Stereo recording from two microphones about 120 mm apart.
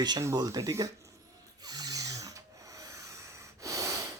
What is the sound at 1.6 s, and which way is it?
Snoring, 30° right (ahead or behind).